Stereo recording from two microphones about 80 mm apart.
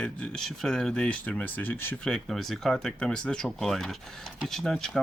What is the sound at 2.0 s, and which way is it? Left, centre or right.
Speech, centre.